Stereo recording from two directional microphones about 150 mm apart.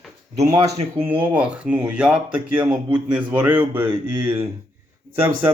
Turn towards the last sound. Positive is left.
turn(degrees=-15)  # may be behind; listen again after turning